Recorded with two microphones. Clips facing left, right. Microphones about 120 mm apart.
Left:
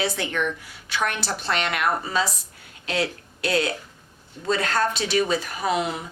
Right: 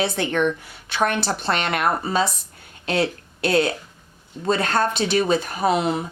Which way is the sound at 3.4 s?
50° right (ahead or behind).